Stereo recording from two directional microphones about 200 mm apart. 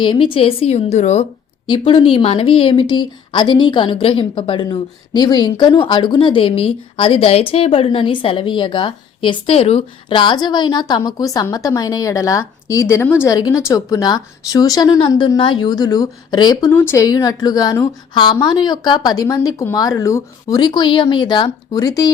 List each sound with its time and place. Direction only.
0.0 s a woman's voice: 25° left (ahead or behind)
1.6 s speech: 25° left (ahead or behind)